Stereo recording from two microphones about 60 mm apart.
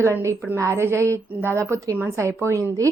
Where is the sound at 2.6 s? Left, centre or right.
Right.